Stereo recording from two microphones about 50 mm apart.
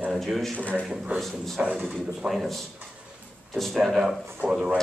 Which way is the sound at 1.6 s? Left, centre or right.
Centre.